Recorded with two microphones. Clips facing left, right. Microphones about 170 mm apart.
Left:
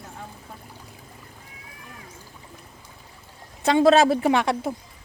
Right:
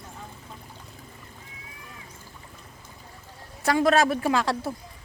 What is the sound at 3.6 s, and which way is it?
A man's voice, 25° left (ahead or behind).